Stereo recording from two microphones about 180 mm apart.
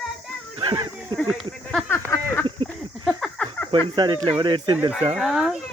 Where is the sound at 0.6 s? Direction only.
25° right (ahead or behind).